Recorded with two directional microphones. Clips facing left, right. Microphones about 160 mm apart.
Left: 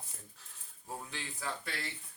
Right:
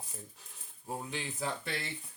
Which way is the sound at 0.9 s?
20° right (ahead or behind).